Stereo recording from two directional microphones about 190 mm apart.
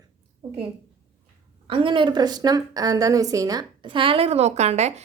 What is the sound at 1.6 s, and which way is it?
A woman's voice, 25° right (ahead or behind).